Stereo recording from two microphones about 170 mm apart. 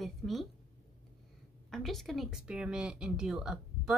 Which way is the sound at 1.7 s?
Centre (ahead or behind).